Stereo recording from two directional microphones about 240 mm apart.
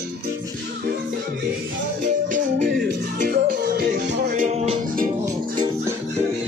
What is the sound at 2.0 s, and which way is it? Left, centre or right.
Music, right.